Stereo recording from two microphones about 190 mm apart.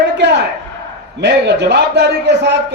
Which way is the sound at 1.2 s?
65° right (ahead or behind).